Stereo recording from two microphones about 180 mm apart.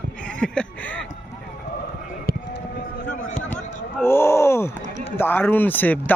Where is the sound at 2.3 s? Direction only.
60° right (ahead or behind).